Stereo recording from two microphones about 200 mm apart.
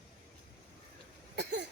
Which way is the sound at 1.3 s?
60° right (ahead or behind).